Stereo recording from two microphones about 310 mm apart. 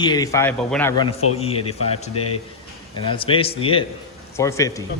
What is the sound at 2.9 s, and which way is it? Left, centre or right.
A man's voice, centre.